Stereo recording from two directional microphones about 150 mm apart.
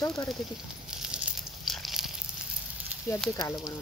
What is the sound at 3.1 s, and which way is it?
Speech, 15° left (ahead or behind).